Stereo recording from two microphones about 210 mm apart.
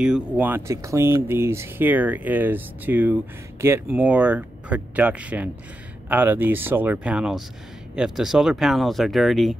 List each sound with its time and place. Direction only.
0.0 s speech: 5° right (ahead or behind)